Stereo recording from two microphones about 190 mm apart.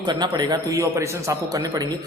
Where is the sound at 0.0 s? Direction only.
20° right (ahead or behind).